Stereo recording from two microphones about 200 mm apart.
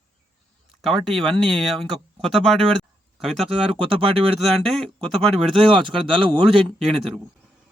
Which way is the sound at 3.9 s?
25° right (ahead or behind).